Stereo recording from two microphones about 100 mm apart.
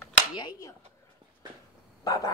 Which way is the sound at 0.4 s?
45° left (ahead or behind).